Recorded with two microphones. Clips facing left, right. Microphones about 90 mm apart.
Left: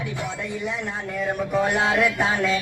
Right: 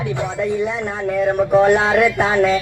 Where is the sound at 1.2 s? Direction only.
55° right (ahead or behind).